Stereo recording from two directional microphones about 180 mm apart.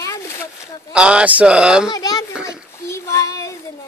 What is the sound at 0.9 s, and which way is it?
Speech, 5° right (ahead or behind).